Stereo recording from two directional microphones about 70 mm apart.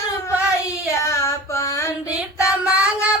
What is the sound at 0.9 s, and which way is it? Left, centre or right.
Child singing, left.